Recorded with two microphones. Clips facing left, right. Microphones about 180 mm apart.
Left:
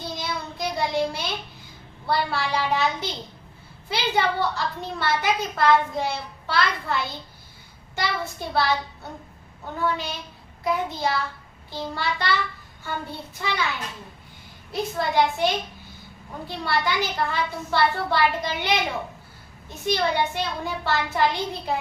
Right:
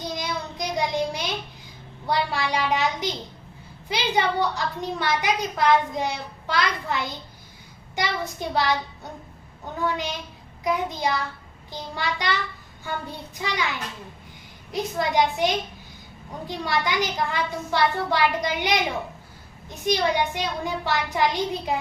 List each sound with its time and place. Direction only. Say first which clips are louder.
0.0 s child singing: right 1 dB; 15° right (ahead or behind)
2.0 s a woman's voice: even; 15° right (ahead or behind)
9.8 s a woman's voice: even; 15° right (ahead or behind)
14.7 s a woman's voice: right 1 dB; 15° right (ahead or behind)